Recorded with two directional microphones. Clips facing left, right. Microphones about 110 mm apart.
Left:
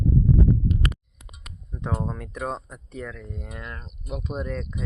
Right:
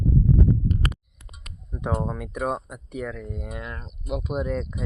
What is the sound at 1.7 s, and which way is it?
Speech, 15° right (ahead or behind).